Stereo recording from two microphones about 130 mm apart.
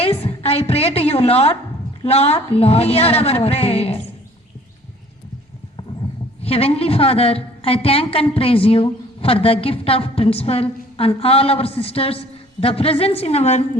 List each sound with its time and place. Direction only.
0.0 s a sound: 50° left (ahead or behind)
2.0 s a woman's voice: 50° left (ahead or behind)
6.4 s a woman's voice: 50° left (ahead or behind)